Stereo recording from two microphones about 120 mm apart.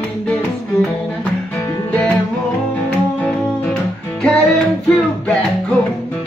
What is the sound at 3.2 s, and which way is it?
Music, 10° left (ahead or behind).